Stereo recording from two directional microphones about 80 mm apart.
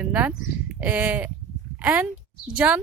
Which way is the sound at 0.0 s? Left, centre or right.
Centre.